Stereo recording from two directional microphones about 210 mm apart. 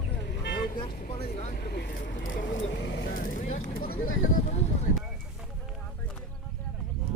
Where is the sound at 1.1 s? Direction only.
30° left (ahead or behind).